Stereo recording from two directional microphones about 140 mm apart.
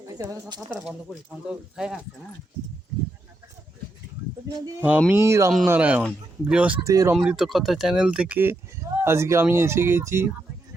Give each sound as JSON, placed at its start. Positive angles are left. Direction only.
{"t": 0.2, "sound": "speech", "side_deg": -25}
{"t": 1.5, "sound": "speech", "side_deg": -5}
{"t": 4.8, "sound": "speech", "side_deg": -10}
{"t": 6.8, "sound": "speech", "side_deg": -20}
{"t": 7.2, "sound": "speech", "side_deg": 0}